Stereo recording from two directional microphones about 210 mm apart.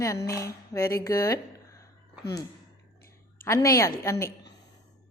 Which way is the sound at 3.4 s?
15° left (ahead or behind).